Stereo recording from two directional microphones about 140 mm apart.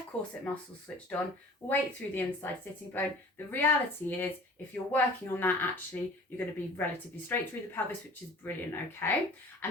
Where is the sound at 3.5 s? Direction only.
15° left (ahead or behind).